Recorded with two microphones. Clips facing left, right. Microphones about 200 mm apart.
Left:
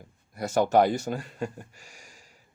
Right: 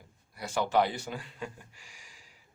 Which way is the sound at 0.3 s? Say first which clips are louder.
Left 6 dB; 45° left (ahead or behind).